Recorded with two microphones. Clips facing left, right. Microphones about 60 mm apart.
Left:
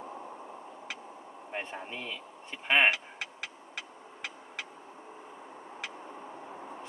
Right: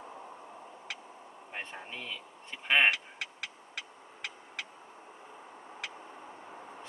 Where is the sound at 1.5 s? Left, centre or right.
Centre.